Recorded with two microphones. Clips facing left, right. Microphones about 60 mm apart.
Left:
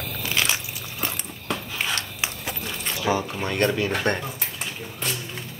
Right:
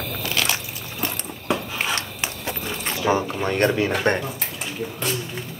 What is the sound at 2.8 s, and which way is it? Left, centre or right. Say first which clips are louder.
Speech: right 3 dB; right.